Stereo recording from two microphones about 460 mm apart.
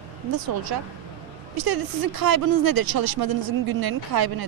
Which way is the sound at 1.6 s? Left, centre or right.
Right.